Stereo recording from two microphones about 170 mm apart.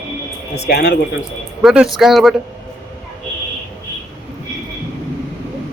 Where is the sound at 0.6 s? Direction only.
75° left (ahead or behind).